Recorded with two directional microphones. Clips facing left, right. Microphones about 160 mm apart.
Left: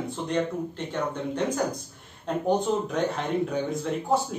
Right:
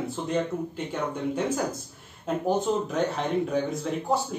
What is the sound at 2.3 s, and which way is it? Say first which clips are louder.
Speech: left 1 dB; 5° right (ahead or behind).